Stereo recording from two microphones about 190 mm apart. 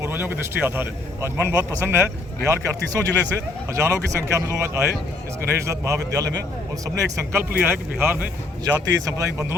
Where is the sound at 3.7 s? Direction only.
15° right (ahead or behind).